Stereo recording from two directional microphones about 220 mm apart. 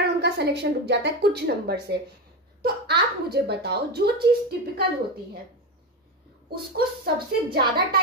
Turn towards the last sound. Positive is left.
turn(degrees=-45)  # may be behind; listen again after turning